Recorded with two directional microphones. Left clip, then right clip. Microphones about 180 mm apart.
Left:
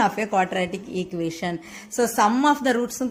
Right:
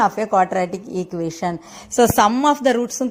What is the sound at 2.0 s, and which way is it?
A woman's voice, 45° right (ahead or behind).